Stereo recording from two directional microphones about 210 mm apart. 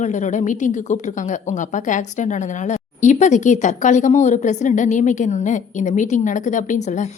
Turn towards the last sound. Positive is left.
turn(degrees=35)  # may be behind; listen again after turning